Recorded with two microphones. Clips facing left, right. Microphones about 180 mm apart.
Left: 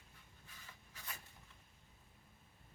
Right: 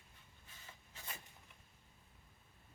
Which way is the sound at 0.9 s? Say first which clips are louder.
Right 1 dB; 25° right (ahead or behind).